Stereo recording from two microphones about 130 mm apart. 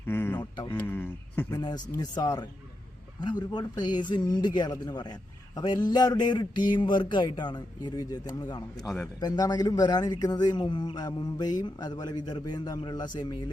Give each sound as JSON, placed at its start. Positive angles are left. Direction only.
{"t": 0.0, "sound": "a sound", "side_deg": 15}
{"t": 0.7, "sound": "speech", "side_deg": 10}
{"t": 1.5, "sound": "speech", "side_deg": 30}